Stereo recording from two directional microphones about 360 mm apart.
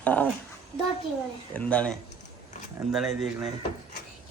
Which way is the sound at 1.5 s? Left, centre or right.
Centre.